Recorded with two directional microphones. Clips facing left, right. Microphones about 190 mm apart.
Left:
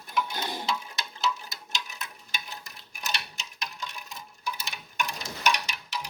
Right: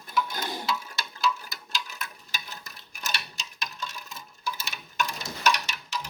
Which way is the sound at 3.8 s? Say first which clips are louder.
Right 1 dB; 15° left (ahead or behind).